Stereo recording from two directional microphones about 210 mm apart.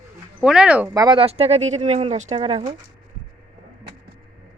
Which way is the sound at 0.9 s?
20° right (ahead or behind).